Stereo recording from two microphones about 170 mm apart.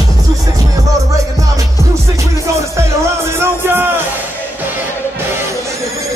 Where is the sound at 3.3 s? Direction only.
15° right (ahead or behind).